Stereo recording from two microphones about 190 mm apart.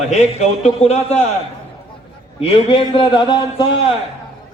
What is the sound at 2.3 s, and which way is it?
A man's voice, 30° left (ahead or behind).